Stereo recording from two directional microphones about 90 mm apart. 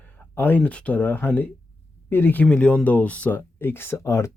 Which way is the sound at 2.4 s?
15° left (ahead or behind).